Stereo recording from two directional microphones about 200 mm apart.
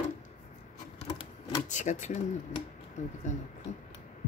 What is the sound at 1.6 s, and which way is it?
Speech, 40° left (ahead or behind).